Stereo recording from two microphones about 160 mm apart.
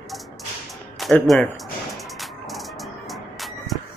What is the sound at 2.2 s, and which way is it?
Music, centre (ahead or behind).